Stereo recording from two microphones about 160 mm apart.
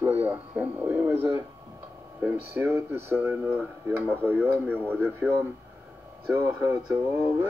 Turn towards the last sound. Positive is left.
turn(degrees=-20)  # may be behind; listen again after turning